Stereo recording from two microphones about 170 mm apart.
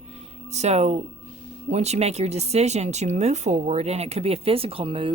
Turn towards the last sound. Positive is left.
turn(degrees=-30)  # may be behind; listen again after turning